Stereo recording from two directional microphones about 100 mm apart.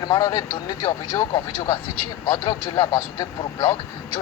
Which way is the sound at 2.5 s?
45° left (ahead or behind).